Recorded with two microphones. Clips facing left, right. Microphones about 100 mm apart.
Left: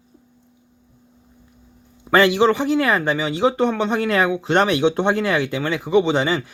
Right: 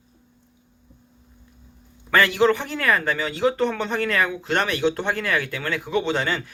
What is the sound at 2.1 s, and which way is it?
Speech, 25° left (ahead or behind).